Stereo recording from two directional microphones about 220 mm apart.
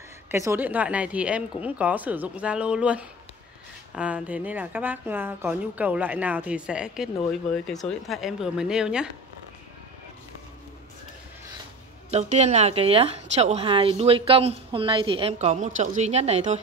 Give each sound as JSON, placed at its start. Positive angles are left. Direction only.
{"t": 0.3, "sound": "a woman's voice", "side_deg": -10}
{"t": 12.1, "sound": "a woman's voice", "side_deg": -30}